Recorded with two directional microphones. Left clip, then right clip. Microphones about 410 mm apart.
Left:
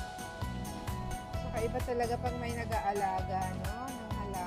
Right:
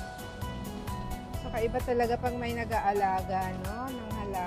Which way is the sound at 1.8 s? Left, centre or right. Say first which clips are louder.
Right 5 dB; right.